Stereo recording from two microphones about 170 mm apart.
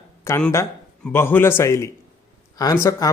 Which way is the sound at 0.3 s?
15° left (ahead or behind).